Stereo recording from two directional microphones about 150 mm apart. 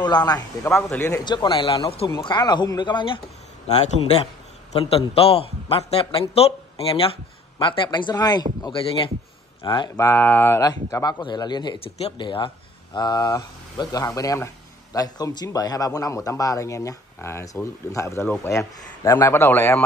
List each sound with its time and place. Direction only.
0.0 s speech: 30° left (ahead or behind)
0.8 s a man's voice: 15° left (ahead or behind)
1.2 s a man's voice: 30° left (ahead or behind)
2.0 s speech: 25° left (ahead or behind)
3.6 s a man's voice: 45° left (ahead or behind); by 8.5 s 25° left (ahead or behind)
9.7 s a man's voice: 30° left (ahead or behind)
10.0 s a man's voice: 10° left (ahead or behind)